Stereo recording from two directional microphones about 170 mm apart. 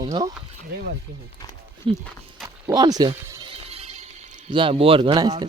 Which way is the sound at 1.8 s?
30° right (ahead or behind).